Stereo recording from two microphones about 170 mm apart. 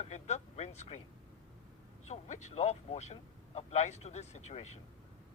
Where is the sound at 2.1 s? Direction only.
45° left (ahead or behind).